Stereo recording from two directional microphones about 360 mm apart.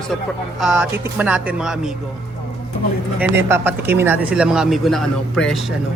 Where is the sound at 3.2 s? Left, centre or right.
Centre.